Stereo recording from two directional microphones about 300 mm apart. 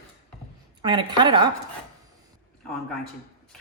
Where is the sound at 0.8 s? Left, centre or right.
Centre.